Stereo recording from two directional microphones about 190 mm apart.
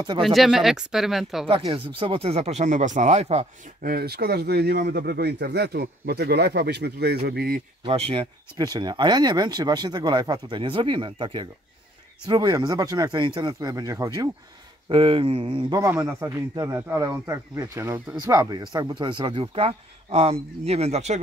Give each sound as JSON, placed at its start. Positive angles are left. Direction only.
{"t": 0.2, "sound": "speech", "side_deg": 0}
{"t": 1.5, "sound": "speech", "side_deg": -25}
{"t": 3.8, "sound": "speech", "side_deg": -55}
{"t": 8.1, "sound": "speech", "side_deg": -25}
{"t": 15.8, "sound": "a man's voice", "side_deg": -15}